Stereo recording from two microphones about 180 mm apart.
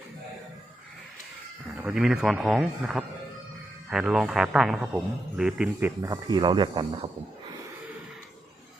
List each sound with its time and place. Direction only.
1.8 s a man's voice: 5° right (ahead or behind)
6.0 s speech: 20° right (ahead or behind)